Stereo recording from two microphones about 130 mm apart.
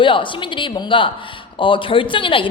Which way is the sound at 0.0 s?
40° left (ahead or behind).